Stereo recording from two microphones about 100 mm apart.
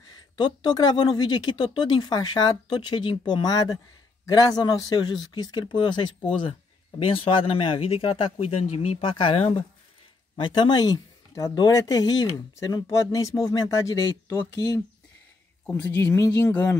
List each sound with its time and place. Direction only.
0.4 s speech: 45° left (ahead or behind)
7.0 s speech: 65° left (ahead or behind)
10.3 s speech: 50° left (ahead or behind); by 14.8 s 35° left (ahead or behind)
15.6 s speech: 20° left (ahead or behind)